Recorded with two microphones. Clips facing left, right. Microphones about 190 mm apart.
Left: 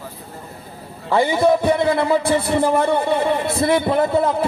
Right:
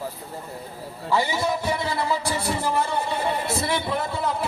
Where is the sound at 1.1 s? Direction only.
55° left (ahead or behind).